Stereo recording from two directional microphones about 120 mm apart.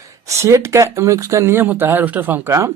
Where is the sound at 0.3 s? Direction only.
25° right (ahead or behind).